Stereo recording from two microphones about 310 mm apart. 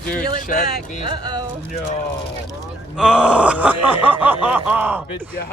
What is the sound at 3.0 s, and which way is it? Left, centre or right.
Speech, centre.